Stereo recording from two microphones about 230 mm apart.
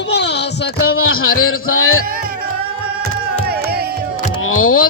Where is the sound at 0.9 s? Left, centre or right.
Left.